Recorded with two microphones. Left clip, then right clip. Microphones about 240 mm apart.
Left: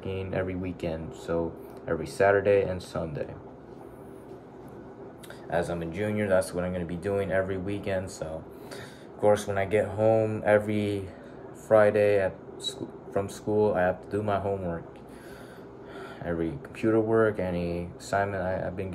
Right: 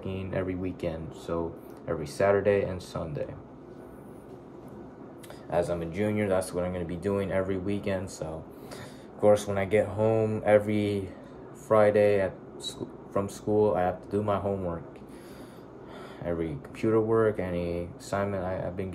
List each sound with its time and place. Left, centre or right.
0.0 s speech: centre
5.5 s speech: centre
16.2 s speech: centre